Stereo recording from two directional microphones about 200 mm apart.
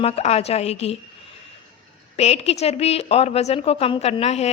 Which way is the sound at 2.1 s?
30° left (ahead or behind).